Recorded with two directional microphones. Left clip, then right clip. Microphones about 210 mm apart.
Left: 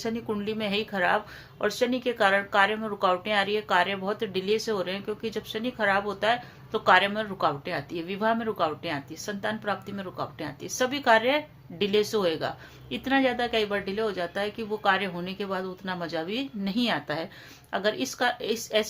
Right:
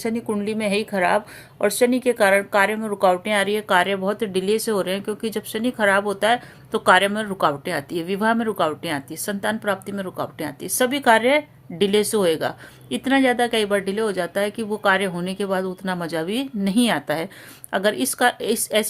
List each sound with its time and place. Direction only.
0.0 s a woman's voice: 25° right (ahead or behind)